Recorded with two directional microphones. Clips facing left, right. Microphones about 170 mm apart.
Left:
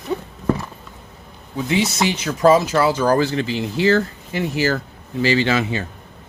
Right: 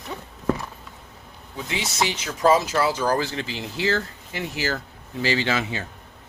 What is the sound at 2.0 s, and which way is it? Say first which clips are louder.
Speech: left 4 dB; 55° left (ahead or behind).